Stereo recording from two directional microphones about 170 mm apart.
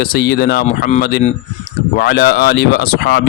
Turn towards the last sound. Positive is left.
turn(degrees=80)